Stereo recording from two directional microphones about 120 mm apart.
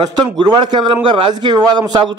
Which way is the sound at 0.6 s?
40° right (ahead or behind).